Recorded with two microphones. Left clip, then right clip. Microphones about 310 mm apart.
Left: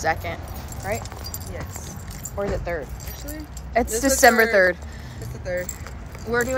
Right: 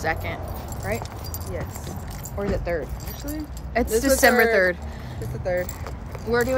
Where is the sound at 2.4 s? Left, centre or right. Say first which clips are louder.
Even; centre.